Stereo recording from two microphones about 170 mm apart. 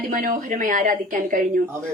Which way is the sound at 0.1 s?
50° right (ahead or behind).